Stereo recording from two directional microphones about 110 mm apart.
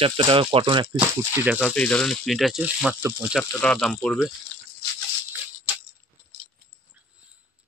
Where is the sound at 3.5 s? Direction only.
10° left (ahead or behind).